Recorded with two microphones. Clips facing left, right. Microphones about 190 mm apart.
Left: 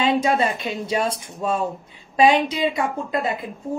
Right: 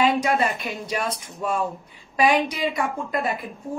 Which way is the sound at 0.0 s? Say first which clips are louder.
Left 1 dB; 25° left (ahead or behind).